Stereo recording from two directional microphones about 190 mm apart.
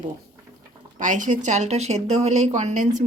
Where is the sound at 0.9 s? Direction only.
40° right (ahead or behind).